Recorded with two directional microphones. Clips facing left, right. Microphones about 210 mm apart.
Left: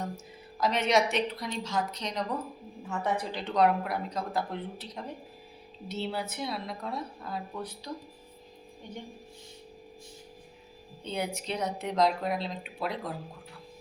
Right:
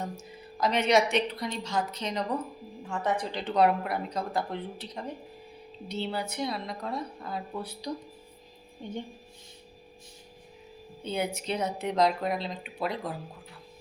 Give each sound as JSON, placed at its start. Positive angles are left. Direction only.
{"t": 0.6, "sound": "speech", "side_deg": 0}
{"t": 8.8, "sound": "speech", "side_deg": -25}
{"t": 11.0, "sound": "speech", "side_deg": -5}